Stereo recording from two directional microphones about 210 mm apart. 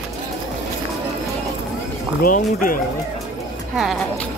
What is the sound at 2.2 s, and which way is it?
Speech, 40° left (ahead or behind).